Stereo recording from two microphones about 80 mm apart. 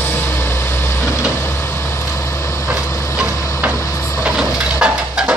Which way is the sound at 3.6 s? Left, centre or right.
Centre.